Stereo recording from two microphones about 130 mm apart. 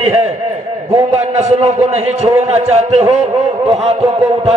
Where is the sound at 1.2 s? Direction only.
60° right (ahead or behind).